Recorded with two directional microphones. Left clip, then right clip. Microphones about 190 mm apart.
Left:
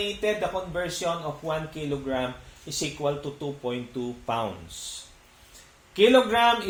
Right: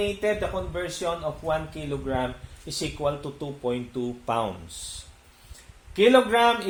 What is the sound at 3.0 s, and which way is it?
A man's voice, 55° right (ahead or behind).